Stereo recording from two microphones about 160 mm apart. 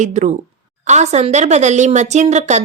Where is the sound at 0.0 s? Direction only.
50° right (ahead or behind).